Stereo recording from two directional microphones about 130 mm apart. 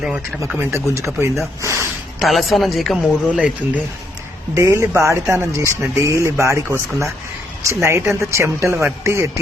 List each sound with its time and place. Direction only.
0.0 s speech: 5° right (ahead or behind)
0.6 s speech: 20° right (ahead or behind)
2.2 s speech: centre (ahead or behind)
4.5 s speech: 20° right (ahead or behind)